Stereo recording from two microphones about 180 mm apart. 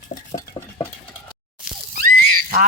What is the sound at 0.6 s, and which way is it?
Stir, 20° left (ahead or behind).